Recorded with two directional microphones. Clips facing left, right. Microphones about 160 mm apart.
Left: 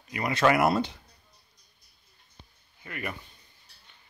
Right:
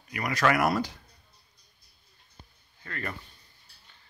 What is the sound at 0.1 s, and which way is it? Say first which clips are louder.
Speech: left 2 dB; 25° left (ahead or behind).